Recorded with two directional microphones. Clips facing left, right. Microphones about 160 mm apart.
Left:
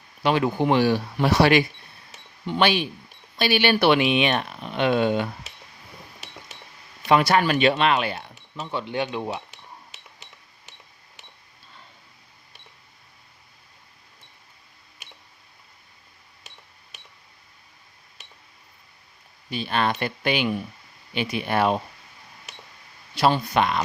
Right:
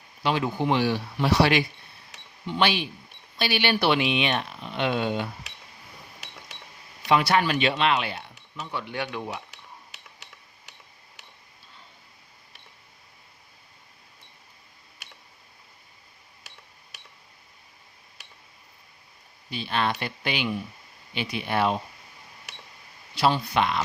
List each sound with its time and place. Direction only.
0.2 s speech: 60° left (ahead or behind)
7.1 s speech: 50° left (ahead or behind)
8.5 s speech: 30° left (ahead or behind)
19.5 s speech: 50° left (ahead or behind)
23.1 s speech: 50° left (ahead or behind)